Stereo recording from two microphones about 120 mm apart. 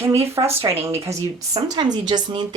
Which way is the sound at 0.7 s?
35° right (ahead or behind).